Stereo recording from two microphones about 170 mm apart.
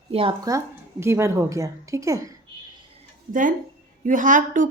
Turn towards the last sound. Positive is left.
turn(degrees=-50)  # may be behind; listen again after turning